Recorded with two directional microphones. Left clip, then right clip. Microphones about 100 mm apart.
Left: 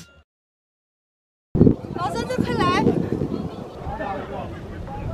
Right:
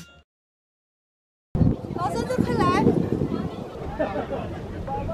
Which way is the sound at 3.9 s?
35° left (ahead or behind).